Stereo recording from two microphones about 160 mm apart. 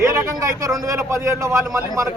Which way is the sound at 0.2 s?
20° right (ahead or behind).